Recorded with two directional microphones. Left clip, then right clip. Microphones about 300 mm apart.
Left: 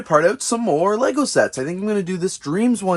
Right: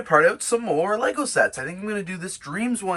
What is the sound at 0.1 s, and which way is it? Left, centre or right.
Speech, left.